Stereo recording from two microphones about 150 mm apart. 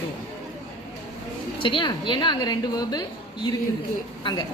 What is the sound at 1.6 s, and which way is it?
A woman's voice, 35° left (ahead or behind).